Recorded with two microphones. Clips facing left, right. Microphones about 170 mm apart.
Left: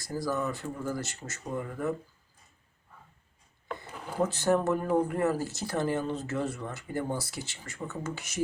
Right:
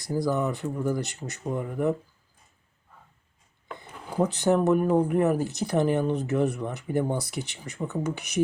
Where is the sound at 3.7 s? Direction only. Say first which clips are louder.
Right 4 dB; 15° right (ahead or behind).